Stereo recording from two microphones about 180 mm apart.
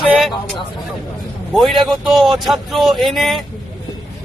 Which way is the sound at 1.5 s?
Centre (ahead or behind).